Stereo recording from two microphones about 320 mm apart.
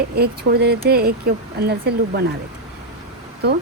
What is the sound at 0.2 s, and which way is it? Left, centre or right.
Speech, right.